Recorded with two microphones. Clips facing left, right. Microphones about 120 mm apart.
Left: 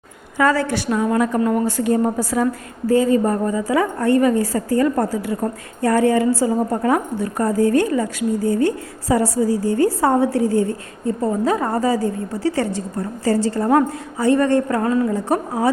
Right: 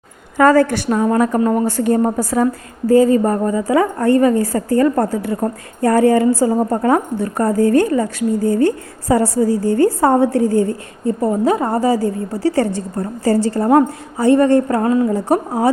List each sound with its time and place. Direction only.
0.3 s a woman's voice: 45° right (ahead or behind)
11.0 s a woman's voice: 25° right (ahead or behind)